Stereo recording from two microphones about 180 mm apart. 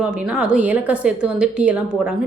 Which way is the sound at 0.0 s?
5° right (ahead or behind).